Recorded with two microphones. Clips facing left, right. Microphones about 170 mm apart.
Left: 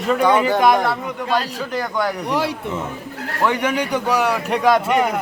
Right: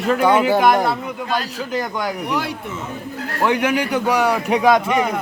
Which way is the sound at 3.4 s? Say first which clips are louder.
Right 1 dB; 10° right (ahead or behind).